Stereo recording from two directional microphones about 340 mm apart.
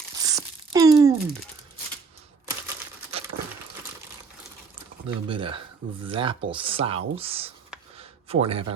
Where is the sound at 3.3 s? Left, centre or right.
Right.